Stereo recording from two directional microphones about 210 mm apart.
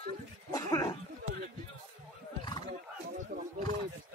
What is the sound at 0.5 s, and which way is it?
Cough, 15° left (ahead or behind).